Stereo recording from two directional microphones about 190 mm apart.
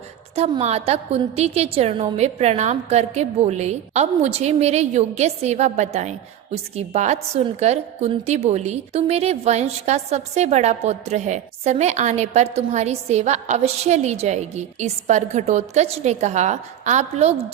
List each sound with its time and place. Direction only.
0.3 s a woman's voice: 35° right (ahead or behind)